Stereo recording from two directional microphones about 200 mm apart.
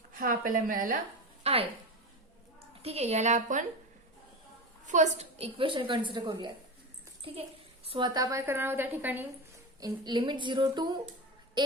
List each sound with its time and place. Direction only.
0.1 s a woman's voice: 45° right (ahead or behind)
1.5 s a woman's voice: 30° right (ahead or behind)
2.8 s a woman's voice: 30° right (ahead or behind)
4.9 s a child's voice: 35° right (ahead or behind); by 9.2 s 10° right (ahead or behind)
9.8 s speech: 20° right (ahead or behind)